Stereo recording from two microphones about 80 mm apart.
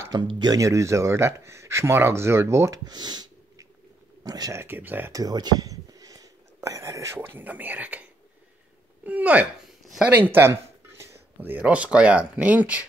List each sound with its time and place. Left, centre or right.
0.1 s speech: right
0.6 s speech: right
2.8 s speech: right
4.6 s speech: right
5.1 s whispering: right
7.2 s speech: right
9.0 s speech: centre
10.0 s a sound: right
11.5 s speech: centre